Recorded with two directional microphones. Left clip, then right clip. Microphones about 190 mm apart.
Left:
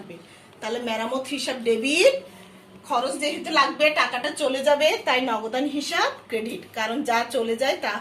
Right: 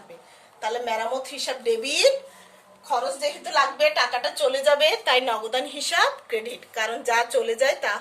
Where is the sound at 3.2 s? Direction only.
35° right (ahead or behind).